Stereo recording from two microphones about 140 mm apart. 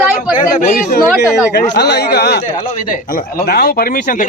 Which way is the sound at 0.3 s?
70° left (ahead or behind).